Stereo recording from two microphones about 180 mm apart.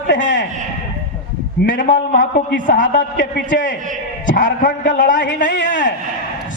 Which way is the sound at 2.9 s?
80° left.